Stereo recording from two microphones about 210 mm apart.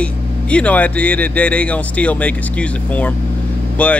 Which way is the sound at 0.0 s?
5° left (ahead or behind).